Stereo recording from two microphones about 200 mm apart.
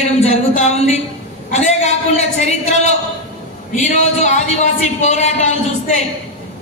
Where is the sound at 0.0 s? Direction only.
35° left (ahead or behind).